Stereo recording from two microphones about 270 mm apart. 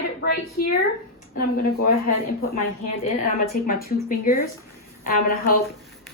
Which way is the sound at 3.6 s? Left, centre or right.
Left.